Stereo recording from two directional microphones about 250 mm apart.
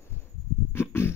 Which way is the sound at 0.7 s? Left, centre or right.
Centre.